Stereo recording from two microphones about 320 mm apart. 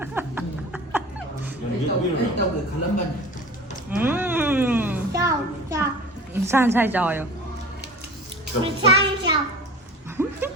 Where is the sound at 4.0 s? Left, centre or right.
Centre.